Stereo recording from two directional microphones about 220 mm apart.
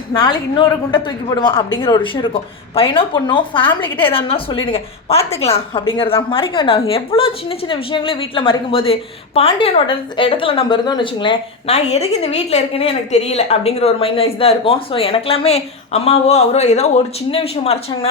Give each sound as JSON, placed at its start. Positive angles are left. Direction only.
{"t": 0.1, "sound": "a woman's voice", "side_deg": 20}